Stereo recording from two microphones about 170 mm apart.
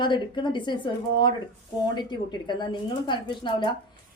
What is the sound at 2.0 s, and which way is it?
A woman's voice, 25° left (ahead or behind).